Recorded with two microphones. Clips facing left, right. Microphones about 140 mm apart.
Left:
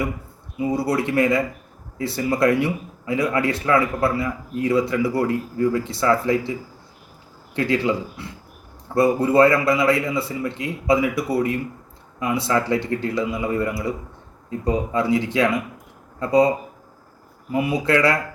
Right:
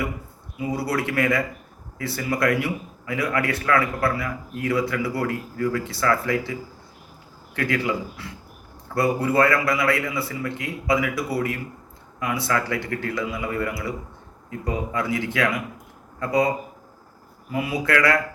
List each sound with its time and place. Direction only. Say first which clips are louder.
0.6 s a man's voice: left 4 dB; 25° left (ahead or behind)
17.5 s a man's voice: left 3 dB; 25° left (ahead or behind)